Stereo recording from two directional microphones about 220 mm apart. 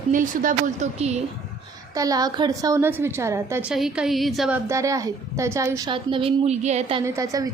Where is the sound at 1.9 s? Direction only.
15° right (ahead or behind); by 4.6 s centre (ahead or behind).